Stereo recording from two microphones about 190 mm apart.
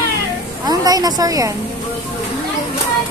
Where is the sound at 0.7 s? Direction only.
20° right (ahead or behind).